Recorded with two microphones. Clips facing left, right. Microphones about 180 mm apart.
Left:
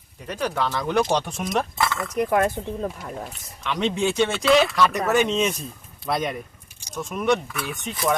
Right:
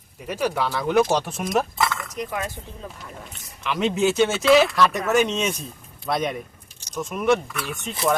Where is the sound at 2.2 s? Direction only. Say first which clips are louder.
Left 11 dB; 55° left (ahead or behind).